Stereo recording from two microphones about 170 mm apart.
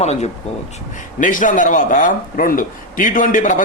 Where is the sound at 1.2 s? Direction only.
50° left (ahead or behind).